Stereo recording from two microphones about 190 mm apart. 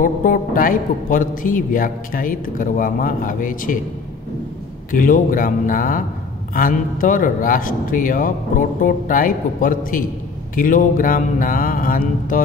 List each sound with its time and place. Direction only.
0.0 s a man's voice: 45° left (ahead or behind)
4.9 s a man's voice: 45° left (ahead or behind)